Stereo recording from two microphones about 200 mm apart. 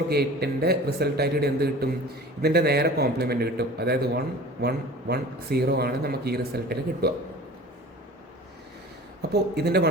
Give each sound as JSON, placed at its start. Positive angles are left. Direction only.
{"t": 0.1, "sound": "speech", "side_deg": -50}
{"t": 9.3, "sound": "speech", "side_deg": -55}